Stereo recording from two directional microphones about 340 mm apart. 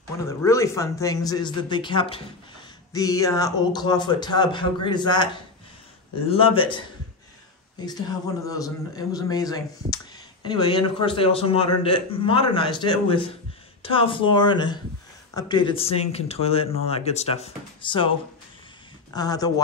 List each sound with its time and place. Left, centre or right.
0.4 s a man's voice: centre
7.8 s a man's voice: centre
19.1 s a man's voice: centre